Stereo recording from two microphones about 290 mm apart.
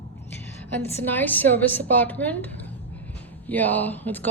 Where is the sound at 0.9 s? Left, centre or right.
Centre.